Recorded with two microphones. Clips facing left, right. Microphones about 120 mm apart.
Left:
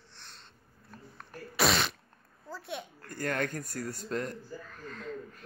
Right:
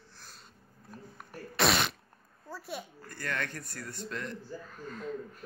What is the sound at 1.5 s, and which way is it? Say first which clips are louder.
Fart: even; centre (ahead or behind).